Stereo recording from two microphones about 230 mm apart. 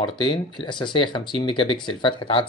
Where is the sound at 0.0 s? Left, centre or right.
Left.